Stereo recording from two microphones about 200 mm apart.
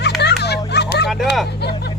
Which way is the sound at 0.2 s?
55° left (ahead or behind).